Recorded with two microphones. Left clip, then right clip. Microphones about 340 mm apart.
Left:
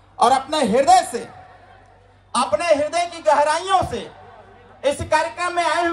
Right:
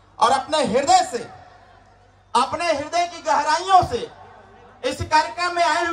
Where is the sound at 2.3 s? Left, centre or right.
Centre.